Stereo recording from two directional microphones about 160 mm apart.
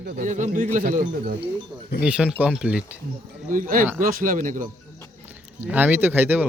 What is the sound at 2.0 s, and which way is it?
Speech, 5° right (ahead or behind).